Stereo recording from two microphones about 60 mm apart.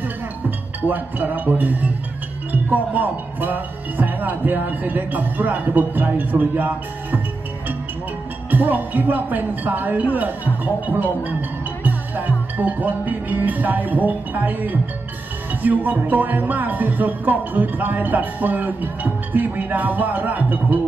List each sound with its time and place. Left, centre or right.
0.8 s speech: right
8.5 s speech: right
11.8 s music: right
15.6 s speech: right